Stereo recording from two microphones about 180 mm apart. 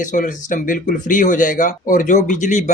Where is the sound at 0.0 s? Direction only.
45° left (ahead or behind).